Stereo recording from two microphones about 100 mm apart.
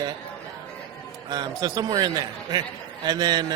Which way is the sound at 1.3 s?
40° right (ahead or behind).